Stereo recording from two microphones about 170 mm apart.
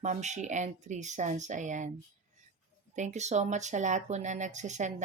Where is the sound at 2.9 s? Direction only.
45° right (ahead or behind).